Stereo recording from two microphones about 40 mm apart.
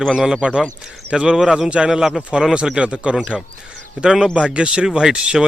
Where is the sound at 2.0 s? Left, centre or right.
Centre.